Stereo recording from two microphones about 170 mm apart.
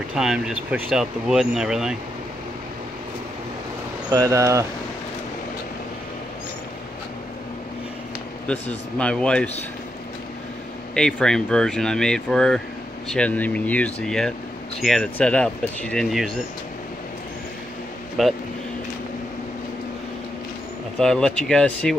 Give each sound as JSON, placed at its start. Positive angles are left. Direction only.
{"t": 0.1, "sound": "speech", "side_deg": -5}
{"t": 4.1, "sound": "speech", "side_deg": -15}
{"t": 8.5, "sound": "speech", "side_deg": 5}
{"t": 11.0, "sound": "speech", "side_deg": 5}
{"t": 18.2, "sound": "speech", "side_deg": 0}
{"t": 21.0, "sound": "speech", "side_deg": 5}